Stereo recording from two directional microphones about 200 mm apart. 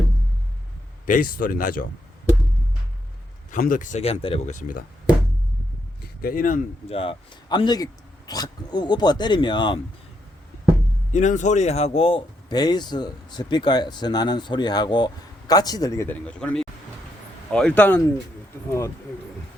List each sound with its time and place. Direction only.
1.0 s speech: 45° left (ahead or behind)
3.5 s speech: 40° left (ahead or behind)
6.2 s speech: 45° left (ahead or behind)
6.8 s speech: 30° left (ahead or behind)
11.1 s speech: 40° left (ahead or behind); by 18.0 s 10° left (ahead or behind)